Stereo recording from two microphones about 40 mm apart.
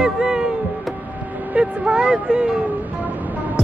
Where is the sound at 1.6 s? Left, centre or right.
Right.